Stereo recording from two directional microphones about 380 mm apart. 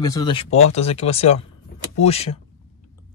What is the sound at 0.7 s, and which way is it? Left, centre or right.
Speech, centre.